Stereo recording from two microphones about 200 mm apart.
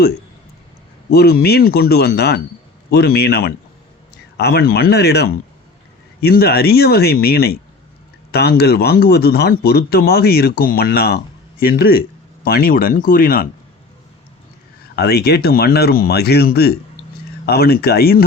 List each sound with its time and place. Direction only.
1.1 s a man's voice: 50° left (ahead or behind)
14.9 s a man's voice: 55° left (ahead or behind)